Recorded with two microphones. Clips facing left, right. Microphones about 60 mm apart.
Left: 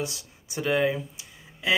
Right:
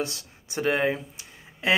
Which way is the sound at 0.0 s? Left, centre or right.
Right.